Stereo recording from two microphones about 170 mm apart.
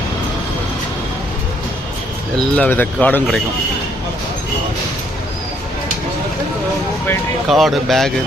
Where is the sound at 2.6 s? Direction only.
10° left (ahead or behind).